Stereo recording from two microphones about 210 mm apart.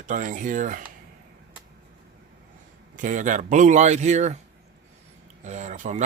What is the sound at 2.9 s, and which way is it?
Speech, 40° right (ahead or behind).